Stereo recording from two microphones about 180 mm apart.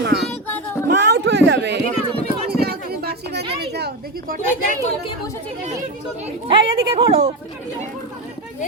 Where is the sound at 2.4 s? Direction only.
60° right (ahead or behind).